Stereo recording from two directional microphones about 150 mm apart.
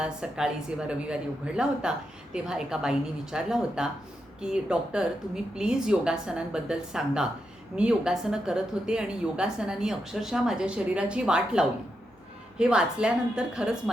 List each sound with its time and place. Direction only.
0.0 s a woman's voice: 5° right (ahead or behind)